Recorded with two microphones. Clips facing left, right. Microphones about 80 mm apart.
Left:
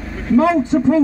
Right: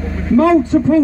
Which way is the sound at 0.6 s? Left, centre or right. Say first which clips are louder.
Right 2 dB; centre.